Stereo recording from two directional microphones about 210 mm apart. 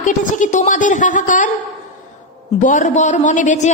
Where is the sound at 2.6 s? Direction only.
35° left (ahead or behind).